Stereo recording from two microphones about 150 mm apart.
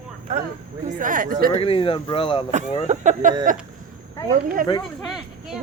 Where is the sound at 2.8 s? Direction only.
50° right (ahead or behind).